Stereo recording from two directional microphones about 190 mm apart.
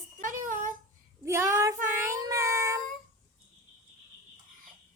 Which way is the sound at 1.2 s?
15° right (ahead or behind).